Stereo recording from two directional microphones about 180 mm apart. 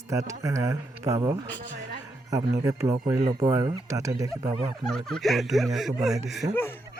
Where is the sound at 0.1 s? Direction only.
15° right (ahead or behind).